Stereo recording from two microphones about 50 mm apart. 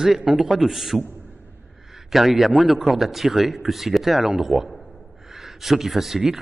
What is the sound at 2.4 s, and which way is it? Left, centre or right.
A man's voice, centre.